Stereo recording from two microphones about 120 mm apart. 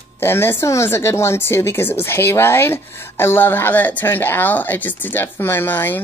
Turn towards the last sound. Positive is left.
turn(degrees=15)  # may be behind; listen again after turning